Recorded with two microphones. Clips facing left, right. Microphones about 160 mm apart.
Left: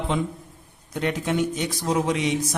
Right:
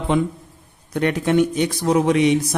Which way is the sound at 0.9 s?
60° right (ahead or behind).